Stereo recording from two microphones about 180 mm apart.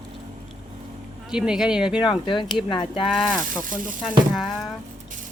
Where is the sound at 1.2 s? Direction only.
5° right (ahead or behind).